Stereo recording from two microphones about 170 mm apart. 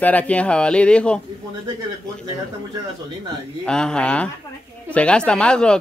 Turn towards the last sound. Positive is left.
turn(degrees=5)  # may be behind; listen again after turning